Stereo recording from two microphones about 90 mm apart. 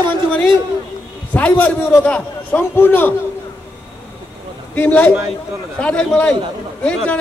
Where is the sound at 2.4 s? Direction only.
25° left (ahead or behind).